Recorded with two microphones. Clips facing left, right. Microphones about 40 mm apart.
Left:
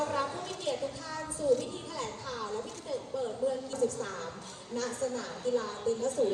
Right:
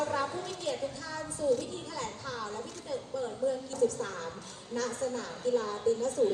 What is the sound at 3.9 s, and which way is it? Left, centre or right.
Speech, right.